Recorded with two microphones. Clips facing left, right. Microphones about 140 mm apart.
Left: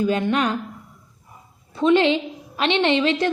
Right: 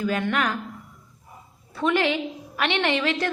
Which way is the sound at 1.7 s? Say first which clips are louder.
Left 6 dB; 20° left (ahead or behind).